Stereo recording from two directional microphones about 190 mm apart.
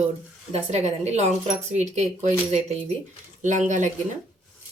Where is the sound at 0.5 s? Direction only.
35° right (ahead or behind).